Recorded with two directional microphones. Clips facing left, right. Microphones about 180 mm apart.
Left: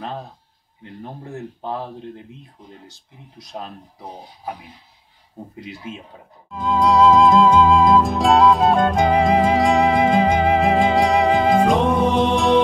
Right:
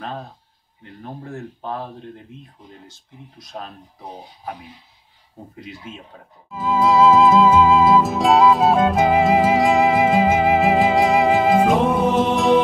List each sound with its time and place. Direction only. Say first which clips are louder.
1.0 s speech: even; 15° left (ahead or behind)
3.5 s speech: left 1 dB; 15° left (ahead or behind)
6.5 s music: even; 5° right (ahead or behind)